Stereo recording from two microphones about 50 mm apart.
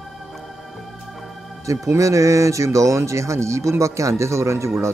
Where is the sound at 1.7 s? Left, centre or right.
Right.